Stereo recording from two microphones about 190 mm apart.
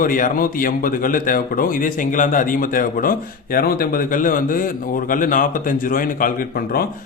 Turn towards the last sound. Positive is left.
turn(degrees=50)  # may be behind; listen again after turning